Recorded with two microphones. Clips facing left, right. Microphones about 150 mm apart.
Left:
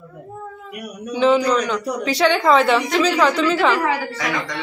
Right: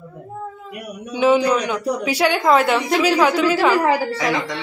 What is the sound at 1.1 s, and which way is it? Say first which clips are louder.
A man's voice: even; 15° right (ahead or behind).